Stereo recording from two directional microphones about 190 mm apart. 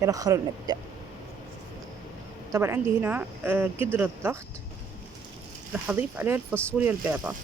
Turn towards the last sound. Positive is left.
turn(degrees=-10)  # may be behind; listen again after turning